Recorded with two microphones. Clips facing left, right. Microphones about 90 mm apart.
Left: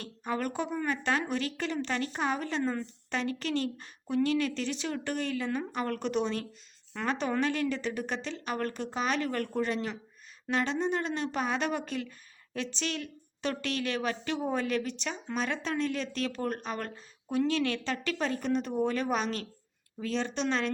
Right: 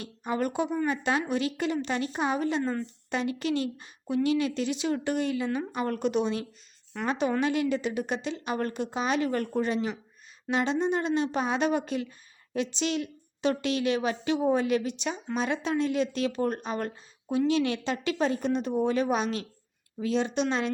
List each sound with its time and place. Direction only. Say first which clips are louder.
0.0 s a woman's voice: right 3 dB; 15° right (ahead or behind)